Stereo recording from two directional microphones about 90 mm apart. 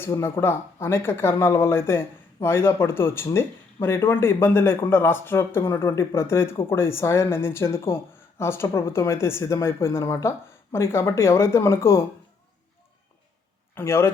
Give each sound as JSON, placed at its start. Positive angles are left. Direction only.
{"t": 0.0, "sound": "speech", "side_deg": 25}
{"t": 13.7, "sound": "speech", "side_deg": 30}